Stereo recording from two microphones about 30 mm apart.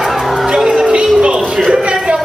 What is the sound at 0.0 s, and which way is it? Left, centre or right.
Music, centre.